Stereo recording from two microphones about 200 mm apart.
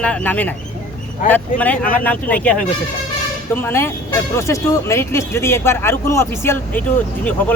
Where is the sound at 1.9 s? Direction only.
10° left (ahead or behind).